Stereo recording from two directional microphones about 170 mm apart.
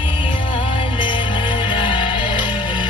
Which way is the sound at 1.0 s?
30° left (ahead or behind).